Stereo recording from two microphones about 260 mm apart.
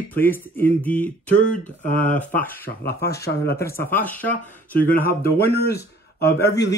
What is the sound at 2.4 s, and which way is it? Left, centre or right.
Mantra, left.